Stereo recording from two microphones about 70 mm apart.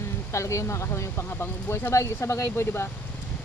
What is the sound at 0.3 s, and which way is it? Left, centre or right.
Speech, left.